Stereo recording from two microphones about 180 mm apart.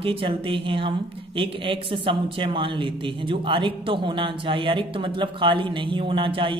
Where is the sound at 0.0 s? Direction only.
30° right (ahead or behind).